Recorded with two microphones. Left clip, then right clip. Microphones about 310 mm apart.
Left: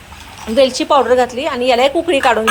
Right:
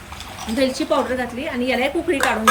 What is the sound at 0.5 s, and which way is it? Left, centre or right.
A woman's voice, centre.